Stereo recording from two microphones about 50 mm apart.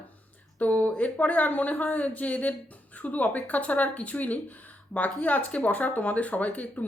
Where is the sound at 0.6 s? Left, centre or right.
Left.